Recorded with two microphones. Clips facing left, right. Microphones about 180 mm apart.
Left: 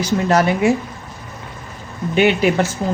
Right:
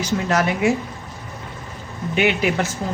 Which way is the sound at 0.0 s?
35° left (ahead or behind).